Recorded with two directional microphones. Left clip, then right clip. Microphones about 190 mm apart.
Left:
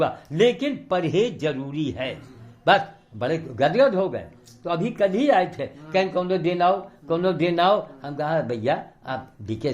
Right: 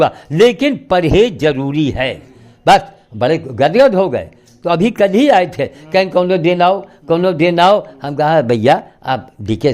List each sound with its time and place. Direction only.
0.0 s a man's voice: 45° right (ahead or behind)